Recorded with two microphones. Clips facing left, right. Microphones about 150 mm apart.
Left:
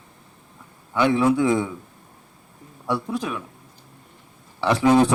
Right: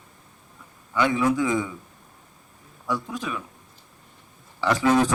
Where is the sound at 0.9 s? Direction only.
25° left (ahead or behind).